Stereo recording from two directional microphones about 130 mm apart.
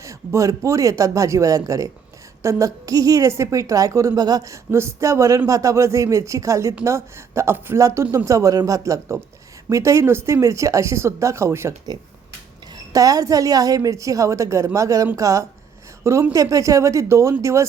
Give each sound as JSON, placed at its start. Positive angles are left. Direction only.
{"t": 0.0, "sound": "a woman's voice", "side_deg": -25}
{"t": 12.7, "sound": "a woman's voice", "side_deg": -25}